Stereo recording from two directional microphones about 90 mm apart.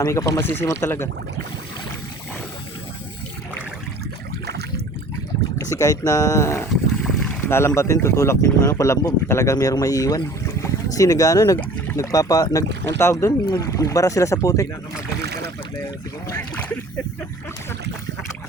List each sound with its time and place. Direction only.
0.0 s speech: 35° left (ahead or behind)
5.5 s speech: 40° left (ahead or behind)
7.0 s boat: 5° left (ahead or behind)
7.4 s speech: 25° left (ahead or behind); by 12.6 s 40° left (ahead or behind)
13.0 s speech: 30° left (ahead or behind)
13.4 s speech: 50° left (ahead or behind)
13.7 s speech: 40° left (ahead or behind)
16.6 s a sound: 20° left (ahead or behind)